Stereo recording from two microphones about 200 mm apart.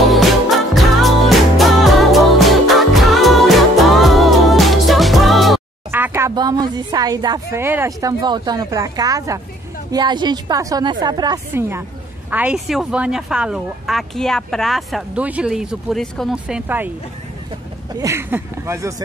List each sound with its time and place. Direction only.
0.0 s music: centre (ahead or behind)
5.9 s a woman's voice: 10° right (ahead or behind)
17.9 s speech: 15° right (ahead or behind)